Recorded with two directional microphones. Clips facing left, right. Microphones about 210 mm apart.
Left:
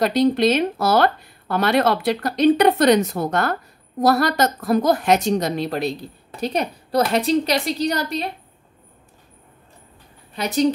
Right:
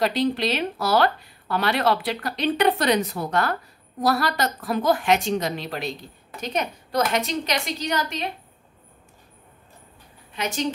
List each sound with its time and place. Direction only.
0.0 s a woman's voice: 40° left (ahead or behind)
10.3 s a woman's voice: 35° left (ahead or behind)